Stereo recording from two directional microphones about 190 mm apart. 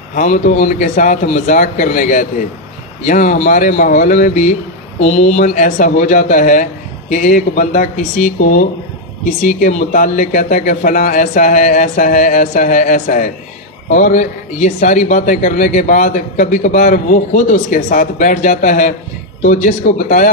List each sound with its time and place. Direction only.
0.1 s speech: 40° left (ahead or behind)